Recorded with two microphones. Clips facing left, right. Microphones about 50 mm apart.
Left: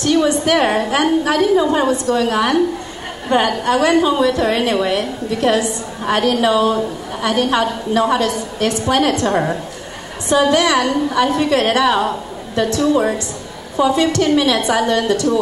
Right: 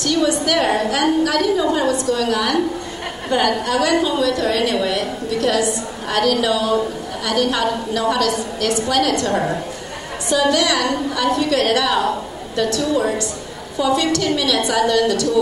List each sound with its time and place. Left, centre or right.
0.0 s a woman's voice: left
10.3 s a woman's voice: left